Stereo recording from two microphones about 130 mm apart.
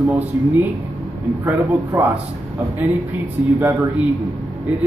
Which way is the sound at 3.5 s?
15° right (ahead or behind).